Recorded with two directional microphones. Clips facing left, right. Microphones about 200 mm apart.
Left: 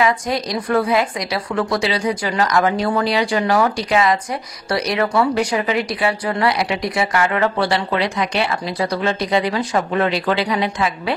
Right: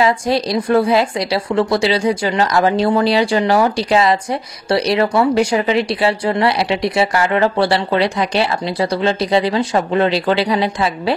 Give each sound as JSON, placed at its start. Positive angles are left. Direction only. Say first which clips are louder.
{"t": 0.0, "sound": "speech", "louder": "right 3 dB", "side_deg": -30}